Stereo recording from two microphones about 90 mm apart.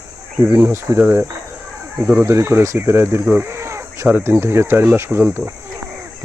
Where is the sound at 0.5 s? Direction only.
30° right (ahead or behind).